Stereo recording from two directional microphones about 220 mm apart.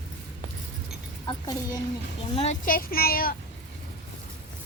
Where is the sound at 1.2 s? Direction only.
15° left (ahead or behind).